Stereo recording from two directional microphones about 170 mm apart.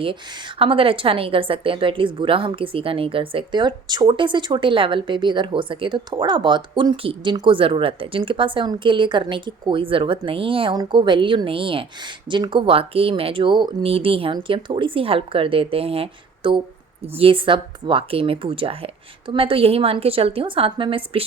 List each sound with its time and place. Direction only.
0.6 s a woman's voice: 30° right (ahead or behind)